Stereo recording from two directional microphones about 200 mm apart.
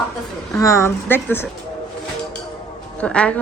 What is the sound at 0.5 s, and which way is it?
Speech, 15° left (ahead or behind).